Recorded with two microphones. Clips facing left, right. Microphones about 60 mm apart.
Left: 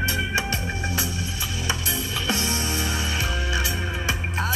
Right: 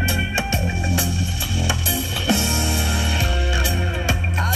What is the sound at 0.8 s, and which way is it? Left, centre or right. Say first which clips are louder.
Music: right 4 dB; left.